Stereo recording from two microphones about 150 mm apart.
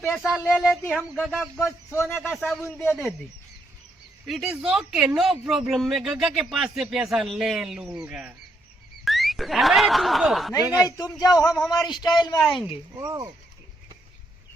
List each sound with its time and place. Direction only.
0.0 s speech: 10° left (ahead or behind)
2.7 s speech: 15° left (ahead or behind)
4.3 s speech: centre (ahead or behind)
9.0 s snicker: centre (ahead or behind)
10.8 s a man's voice: 25° left (ahead or behind)
12.4 s speech: 5° left (ahead or behind)
13.0 s speech: 25° right (ahead or behind)